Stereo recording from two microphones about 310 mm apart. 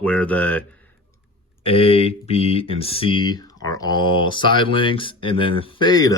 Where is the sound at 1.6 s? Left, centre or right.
Centre.